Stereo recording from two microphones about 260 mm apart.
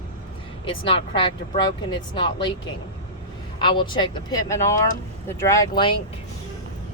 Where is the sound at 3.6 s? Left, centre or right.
Centre.